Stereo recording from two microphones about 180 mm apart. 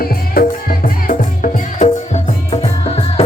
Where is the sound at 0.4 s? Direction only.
55° left (ahead or behind).